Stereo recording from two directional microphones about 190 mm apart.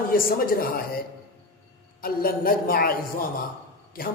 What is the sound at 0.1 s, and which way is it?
Speech, 50° left (ahead or behind).